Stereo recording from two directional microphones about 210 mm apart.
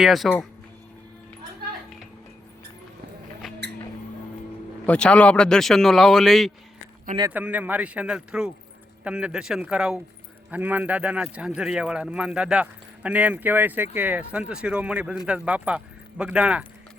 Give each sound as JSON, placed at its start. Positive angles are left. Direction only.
{"t": 0.0, "sound": "speech", "side_deg": 0}
{"t": 4.9, "sound": "speech", "side_deg": 5}